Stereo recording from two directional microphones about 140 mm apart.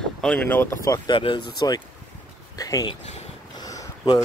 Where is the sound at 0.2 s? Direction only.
10° left (ahead or behind).